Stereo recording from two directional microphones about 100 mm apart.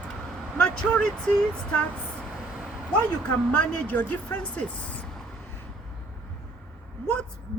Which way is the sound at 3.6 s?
15° left (ahead or behind).